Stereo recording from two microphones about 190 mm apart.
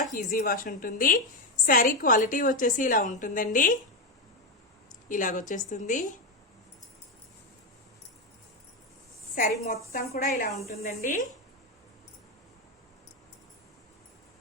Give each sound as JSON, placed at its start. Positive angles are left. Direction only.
{"t": 0.0, "sound": "a woman's voice", "side_deg": 45}
{"t": 5.0, "sound": "a woman's voice", "side_deg": 45}
{"t": 9.3, "sound": "a woman's voice", "side_deg": 45}